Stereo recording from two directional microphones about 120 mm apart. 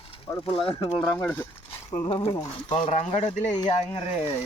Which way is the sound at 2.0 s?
50° left (ahead or behind).